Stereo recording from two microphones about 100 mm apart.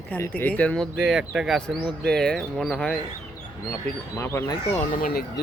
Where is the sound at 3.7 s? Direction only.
25° left (ahead or behind).